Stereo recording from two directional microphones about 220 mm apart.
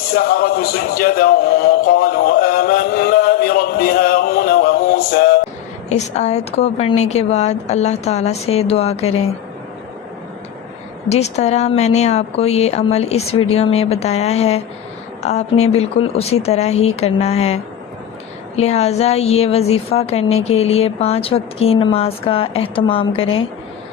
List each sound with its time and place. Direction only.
0.1 s speech: 45° left (ahead or behind)
5.9 s speech: 30° left (ahead or behind)
11.1 s speech: 30° left (ahead or behind)